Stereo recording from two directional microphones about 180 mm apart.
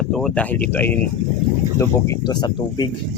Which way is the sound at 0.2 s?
5° left (ahead or behind).